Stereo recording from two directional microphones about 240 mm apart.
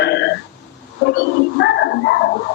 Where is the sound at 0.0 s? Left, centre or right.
Left.